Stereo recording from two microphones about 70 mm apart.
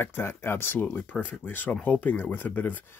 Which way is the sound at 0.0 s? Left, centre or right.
Left.